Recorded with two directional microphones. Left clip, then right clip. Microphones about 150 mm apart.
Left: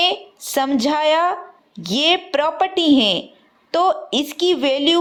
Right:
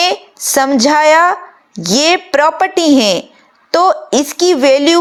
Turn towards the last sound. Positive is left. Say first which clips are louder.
# right 8 dB
turn(degrees=-40)  # may be behind; listen again after turning